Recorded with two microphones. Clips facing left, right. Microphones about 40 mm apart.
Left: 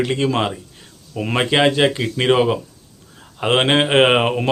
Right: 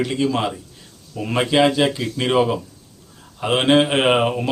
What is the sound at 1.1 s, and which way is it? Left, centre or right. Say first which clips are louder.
Speech: even; left.